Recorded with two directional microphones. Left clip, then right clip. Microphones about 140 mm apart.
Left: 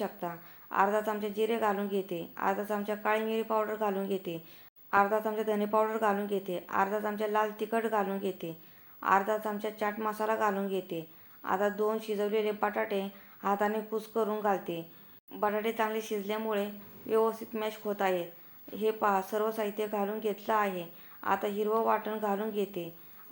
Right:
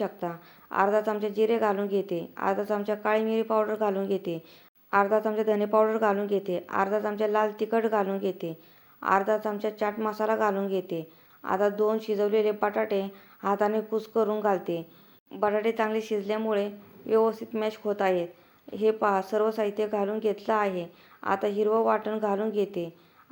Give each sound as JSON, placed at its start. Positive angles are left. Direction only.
{"t": 0.0, "sound": "a woman's voice", "side_deg": -35}